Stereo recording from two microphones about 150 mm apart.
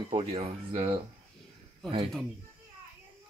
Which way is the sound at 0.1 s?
40° right (ahead or behind).